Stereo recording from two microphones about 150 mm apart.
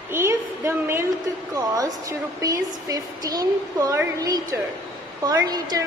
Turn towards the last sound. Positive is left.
turn(degrees=-25)  # may be behind; listen again after turning